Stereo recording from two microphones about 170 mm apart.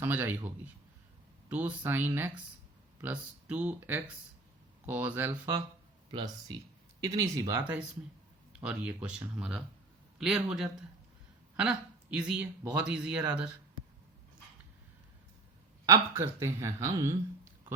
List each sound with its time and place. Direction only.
0.0 s speech: 10° right (ahead or behind)
6.1 s speech: 25° right (ahead or behind); by 13.5 s 5° right (ahead or behind)
15.9 s speech: 15° right (ahead or behind)